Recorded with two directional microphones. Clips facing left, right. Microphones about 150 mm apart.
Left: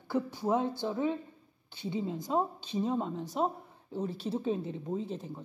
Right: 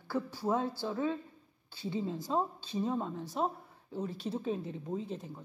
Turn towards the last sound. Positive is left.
turn(degrees=30)  # may be behind; listen again after turning